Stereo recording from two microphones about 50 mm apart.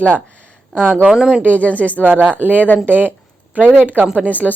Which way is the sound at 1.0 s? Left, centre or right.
Centre.